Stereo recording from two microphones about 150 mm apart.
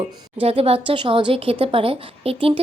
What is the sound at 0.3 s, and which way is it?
A woman's voice, 40° right (ahead or behind).